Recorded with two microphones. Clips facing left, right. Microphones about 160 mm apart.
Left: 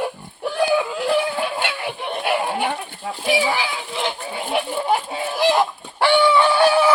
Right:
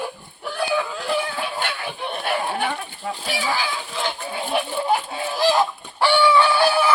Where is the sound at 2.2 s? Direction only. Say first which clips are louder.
Left 3 dB; 10° left (ahead or behind).